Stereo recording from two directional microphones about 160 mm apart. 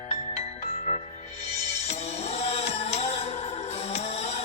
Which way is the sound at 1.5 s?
40° left (ahead or behind).